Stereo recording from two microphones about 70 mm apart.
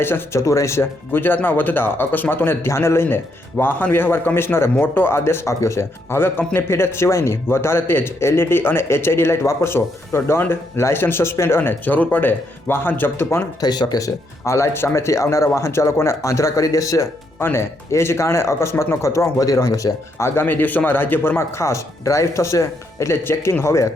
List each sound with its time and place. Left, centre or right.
0.0 s speech: left
0.4 s speech: left
13.6 s speech: left
14.4 s speech: left
17.4 s speech: left
20.2 s speech: left